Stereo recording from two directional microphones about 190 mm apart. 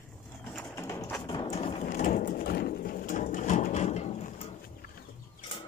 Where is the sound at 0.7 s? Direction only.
15° left (ahead or behind).